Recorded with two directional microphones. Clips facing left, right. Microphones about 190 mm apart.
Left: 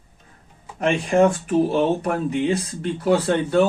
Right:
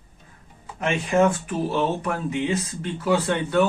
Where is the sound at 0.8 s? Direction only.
40° left (ahead or behind).